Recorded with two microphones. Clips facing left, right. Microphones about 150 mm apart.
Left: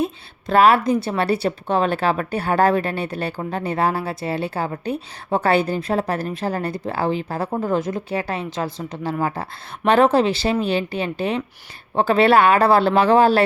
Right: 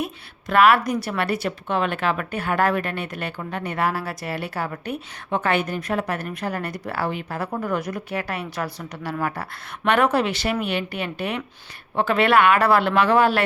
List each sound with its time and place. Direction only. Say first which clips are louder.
0.0 s a woman's voice: left 5 dB; 30° left (ahead or behind)